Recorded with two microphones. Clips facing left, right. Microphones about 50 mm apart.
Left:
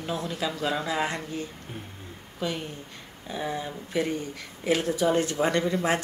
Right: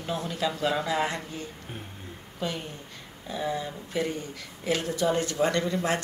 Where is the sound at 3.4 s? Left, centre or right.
Left.